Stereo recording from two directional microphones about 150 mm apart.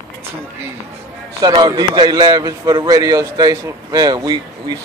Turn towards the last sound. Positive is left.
turn(degrees=-25)  # may be behind; listen again after turning